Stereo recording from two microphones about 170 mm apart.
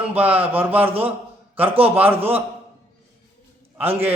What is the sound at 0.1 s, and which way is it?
A man's voice, 10° right (ahead or behind).